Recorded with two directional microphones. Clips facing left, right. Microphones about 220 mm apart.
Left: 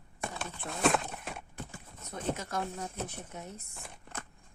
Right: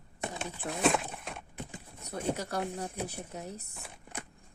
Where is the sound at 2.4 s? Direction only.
35° right (ahead or behind).